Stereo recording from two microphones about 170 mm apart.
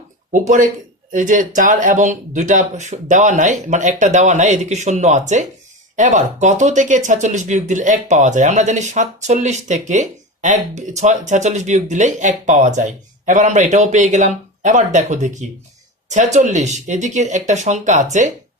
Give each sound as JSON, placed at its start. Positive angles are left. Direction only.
{"t": 0.3, "sound": "speech", "side_deg": -45}